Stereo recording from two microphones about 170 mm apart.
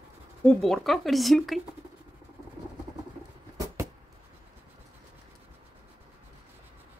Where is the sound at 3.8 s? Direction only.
15° right (ahead or behind).